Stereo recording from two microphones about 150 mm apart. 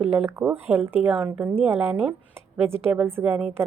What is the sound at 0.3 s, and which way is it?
A woman's voice, 15° right (ahead or behind).